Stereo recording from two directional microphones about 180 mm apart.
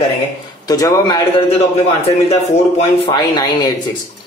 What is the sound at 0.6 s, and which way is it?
Speech, 20° left (ahead or behind).